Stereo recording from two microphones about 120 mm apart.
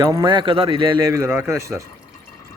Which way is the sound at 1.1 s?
20° right (ahead or behind).